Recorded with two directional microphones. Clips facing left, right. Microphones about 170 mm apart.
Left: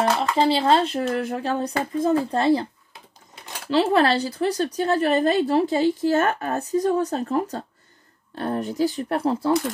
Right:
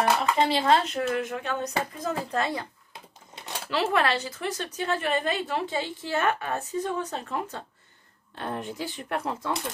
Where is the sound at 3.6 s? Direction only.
30° left (ahead or behind).